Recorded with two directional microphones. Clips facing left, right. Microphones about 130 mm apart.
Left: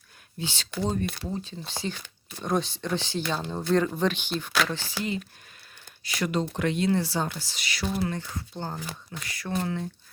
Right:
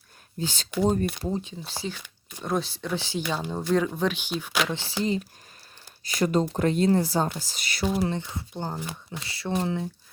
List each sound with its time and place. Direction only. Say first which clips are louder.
0.3 s speech: right 3 dB; 40° right (ahead or behind)
0.7 s speech: right 6 dB; 15° right (ahead or behind)
1.5 s speech: even; 5° right (ahead or behind)
4.7 s speech: right 4 dB; 25° right (ahead or behind); by 7.9 s 50° right (ahead or behind)
8.0 s speech: right 2 dB; 20° right (ahead or behind)
9.1 s speech: right 2 dB; 25° right (ahead or behind)